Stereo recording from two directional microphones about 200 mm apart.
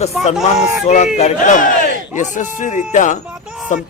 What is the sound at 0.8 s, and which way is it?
Speech, 35° left (ahead or behind).